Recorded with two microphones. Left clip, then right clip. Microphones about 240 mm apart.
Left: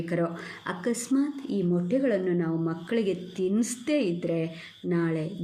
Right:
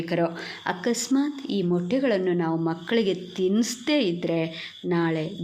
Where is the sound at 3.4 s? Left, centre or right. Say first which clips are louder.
Right 4 dB; centre.